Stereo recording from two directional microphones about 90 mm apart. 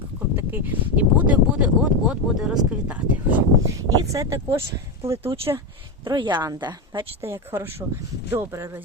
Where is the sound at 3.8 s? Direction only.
40° right (ahead or behind).